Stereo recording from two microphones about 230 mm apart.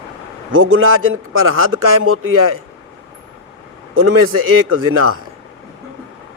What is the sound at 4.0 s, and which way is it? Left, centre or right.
A man's voice, right.